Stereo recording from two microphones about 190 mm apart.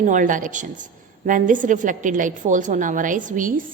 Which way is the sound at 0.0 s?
40° right (ahead or behind).